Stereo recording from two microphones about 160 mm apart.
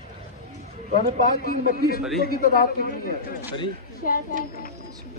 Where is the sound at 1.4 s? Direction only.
65° left (ahead or behind).